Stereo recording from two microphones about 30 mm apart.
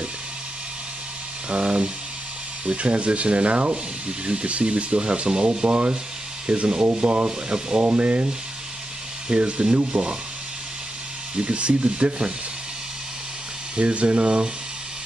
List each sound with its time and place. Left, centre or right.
1.5 s speech: right
7.8 s rub: right
9.3 s rub: right
11.3 s rub: right
13.7 s speech: right